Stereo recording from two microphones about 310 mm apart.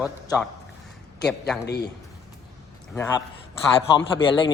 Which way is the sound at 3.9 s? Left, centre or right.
Centre.